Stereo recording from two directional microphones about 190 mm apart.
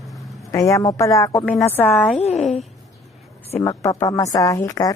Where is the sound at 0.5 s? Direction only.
15° left (ahead or behind).